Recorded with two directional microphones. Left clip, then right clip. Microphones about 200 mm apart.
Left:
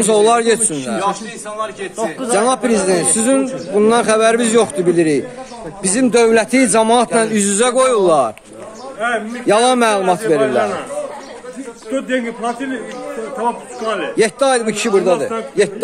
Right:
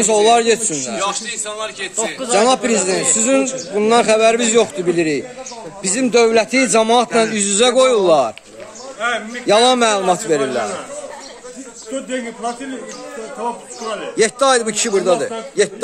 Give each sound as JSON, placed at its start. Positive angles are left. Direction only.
{"t": 0.0, "sound": "a man's voice", "side_deg": -5}
{"t": 2.0, "sound": "speech", "side_deg": -45}
{"t": 2.3, "sound": "a man's voice", "side_deg": -5}
{"t": 11.9, "sound": "a man's voice", "side_deg": -15}
{"t": 14.1, "sound": "a man's voice", "side_deg": 5}